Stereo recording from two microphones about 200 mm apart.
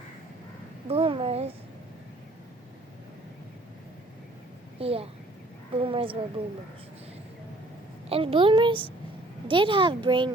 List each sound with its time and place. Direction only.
0.9 s a child's voice: 30° right (ahead or behind)
4.8 s a child's voice: 30° right (ahead or behind)
8.1 s a child's voice: 25° right (ahead or behind)